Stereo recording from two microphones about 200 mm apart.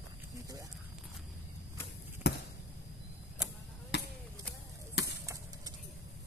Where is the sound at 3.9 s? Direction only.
55° left (ahead or behind).